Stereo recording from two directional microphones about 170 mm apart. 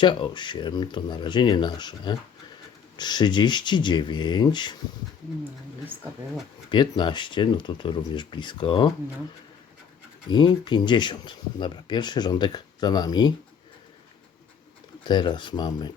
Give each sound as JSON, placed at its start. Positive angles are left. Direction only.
{"t": 0.0, "sound": "speech", "side_deg": 25}
{"t": 6.7, "sound": "speech", "side_deg": 25}
{"t": 10.2, "sound": "speech", "side_deg": 25}
{"t": 15.0, "sound": "speech", "side_deg": 25}